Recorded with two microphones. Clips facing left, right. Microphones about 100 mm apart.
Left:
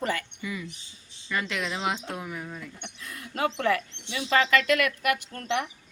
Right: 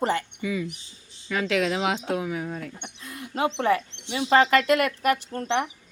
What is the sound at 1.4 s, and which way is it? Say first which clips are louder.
Speech: right 9 dB; 90° right.